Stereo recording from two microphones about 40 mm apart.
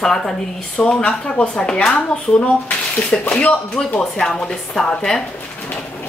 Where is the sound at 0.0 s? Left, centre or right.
Centre.